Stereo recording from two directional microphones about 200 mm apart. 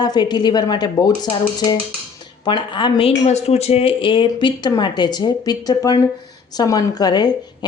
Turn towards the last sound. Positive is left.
turn(degrees=20)  # may be behind; listen again after turning